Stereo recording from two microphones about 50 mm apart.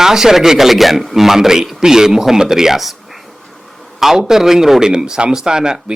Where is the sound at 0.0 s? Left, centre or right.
Centre.